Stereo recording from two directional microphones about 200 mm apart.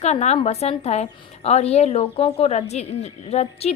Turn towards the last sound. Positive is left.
turn(degrees=30)  # may be behind; listen again after turning